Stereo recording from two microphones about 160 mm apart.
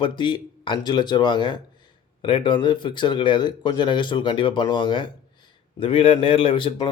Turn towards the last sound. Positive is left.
turn(degrees=30)  # may be behind; listen again after turning